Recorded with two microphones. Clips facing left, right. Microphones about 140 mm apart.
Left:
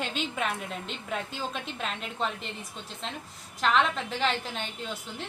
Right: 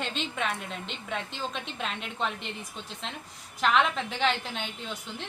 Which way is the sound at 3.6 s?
Centre (ahead or behind).